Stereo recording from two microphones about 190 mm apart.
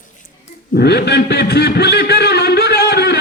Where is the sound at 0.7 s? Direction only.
55° left (ahead or behind).